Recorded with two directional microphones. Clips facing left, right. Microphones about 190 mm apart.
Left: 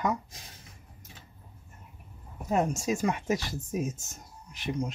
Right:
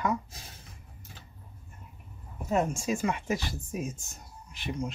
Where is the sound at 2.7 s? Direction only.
40° left (ahead or behind).